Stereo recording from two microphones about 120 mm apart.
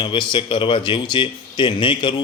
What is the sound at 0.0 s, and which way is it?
A man's voice, 40° left (ahead or behind).